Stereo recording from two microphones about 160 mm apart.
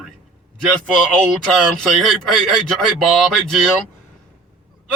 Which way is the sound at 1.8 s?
Centre (ahead or behind).